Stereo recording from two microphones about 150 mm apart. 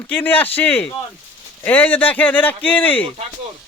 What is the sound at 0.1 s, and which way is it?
A man's voice, 10° left (ahead or behind).